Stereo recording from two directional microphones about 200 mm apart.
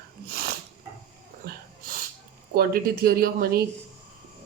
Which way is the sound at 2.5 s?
50° right (ahead or behind).